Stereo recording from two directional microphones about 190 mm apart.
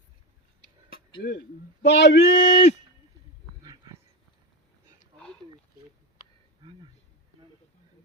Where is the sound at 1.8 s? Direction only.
65° left (ahead or behind).